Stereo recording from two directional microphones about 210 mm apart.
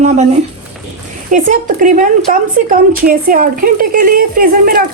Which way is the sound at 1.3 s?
35° right (ahead or behind).